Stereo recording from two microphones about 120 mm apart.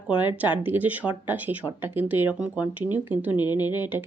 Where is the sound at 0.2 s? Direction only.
15° right (ahead or behind).